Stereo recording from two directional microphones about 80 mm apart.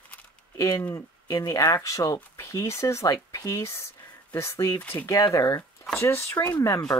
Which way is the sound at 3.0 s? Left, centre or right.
Left.